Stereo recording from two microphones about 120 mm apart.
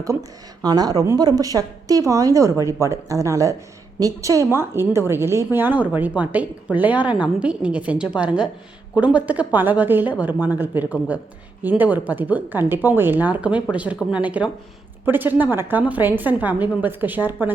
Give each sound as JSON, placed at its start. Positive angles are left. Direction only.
{"t": 0.0, "sound": "a woman's voice", "side_deg": -30}